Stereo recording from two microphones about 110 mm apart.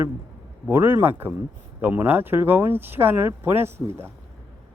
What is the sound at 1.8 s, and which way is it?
Speech, 15° right (ahead or behind).